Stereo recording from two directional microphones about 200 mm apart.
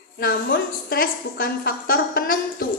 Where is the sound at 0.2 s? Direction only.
50° left (ahead or behind).